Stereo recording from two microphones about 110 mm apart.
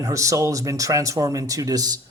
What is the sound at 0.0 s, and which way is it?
Speech, 30° right (ahead or behind).